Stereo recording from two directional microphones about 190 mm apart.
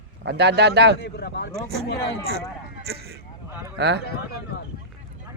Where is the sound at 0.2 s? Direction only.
60° right (ahead or behind).